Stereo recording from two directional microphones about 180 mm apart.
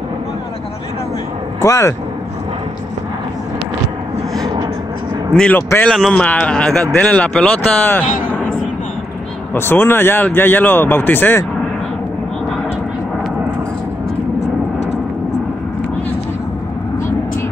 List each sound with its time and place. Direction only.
1.6 s a man's voice: 15° left (ahead or behind)
5.3 s a man's voice: 5° left (ahead or behind)
8.3 s a sound: 10° left (ahead or behind)
9.5 s a man's voice: 10° left (ahead or behind)